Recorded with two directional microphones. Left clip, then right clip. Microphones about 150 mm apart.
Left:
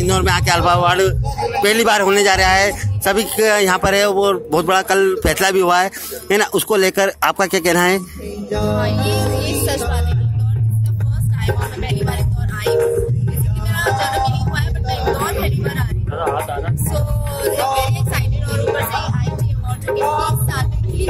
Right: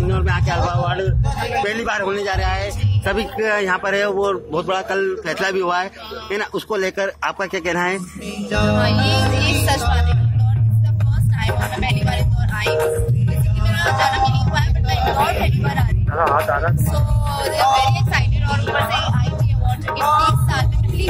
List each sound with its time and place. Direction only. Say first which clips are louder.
0.1 s speech: left 9 dB; 75° left (ahead or behind); by 4.2 s 55° left (ahead or behind)
4.5 s speech: left 6 dB; 65° left (ahead or behind)
8.5 s music: right 1 dB; 35° left (ahead or behind)
8.7 s music: right 1 dB; 10° right (ahead or behind)
11.4 s music: right 2 dB; 10° right (ahead or behind)
12.6 s music: left 3 dB; 30° left (ahead or behind)
13.4 s music: even; 10° right (ahead or behind)
16.2 s speech: right 4 dB; 10° left (ahead or behind)
16.9 s music: even; 10° right (ahead or behind)
19.9 s music: even; 30° left (ahead or behind)